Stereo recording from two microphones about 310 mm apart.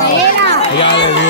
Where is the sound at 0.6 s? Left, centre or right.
Centre.